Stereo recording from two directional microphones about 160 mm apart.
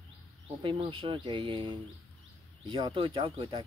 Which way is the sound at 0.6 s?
35° right (ahead or behind).